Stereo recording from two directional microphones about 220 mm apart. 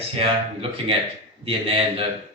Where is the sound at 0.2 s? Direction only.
25° right (ahead or behind).